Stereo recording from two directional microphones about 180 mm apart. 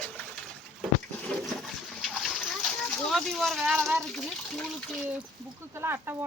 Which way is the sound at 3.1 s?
Centre (ahead or behind).